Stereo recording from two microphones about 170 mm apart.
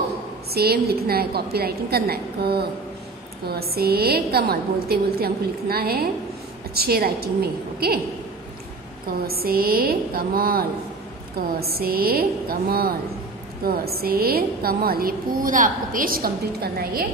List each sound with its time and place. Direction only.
0.5 s a woman's voice: 65° right (ahead or behind)
9.2 s a woman's voice: 65° right (ahead or behind)